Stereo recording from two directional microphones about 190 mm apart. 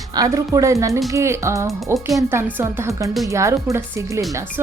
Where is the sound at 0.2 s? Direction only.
20° right (ahead or behind).